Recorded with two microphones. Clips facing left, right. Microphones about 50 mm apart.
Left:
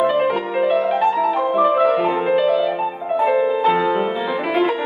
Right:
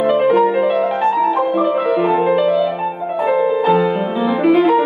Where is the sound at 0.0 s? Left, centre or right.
Centre.